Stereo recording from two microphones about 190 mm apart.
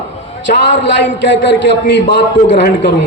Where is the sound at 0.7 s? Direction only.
70° left (ahead or behind).